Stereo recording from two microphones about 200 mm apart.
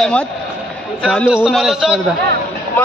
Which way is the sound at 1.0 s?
Centre (ahead or behind).